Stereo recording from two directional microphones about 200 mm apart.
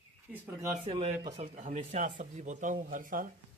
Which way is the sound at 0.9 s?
25° right (ahead or behind).